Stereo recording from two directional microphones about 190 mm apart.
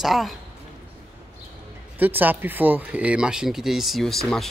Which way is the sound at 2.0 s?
10° right (ahead or behind).